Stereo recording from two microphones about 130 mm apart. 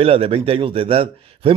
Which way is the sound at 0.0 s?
45° right (ahead or behind).